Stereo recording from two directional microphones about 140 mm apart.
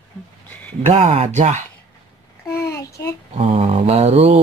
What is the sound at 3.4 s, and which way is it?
Mantra, 40° right (ahead or behind).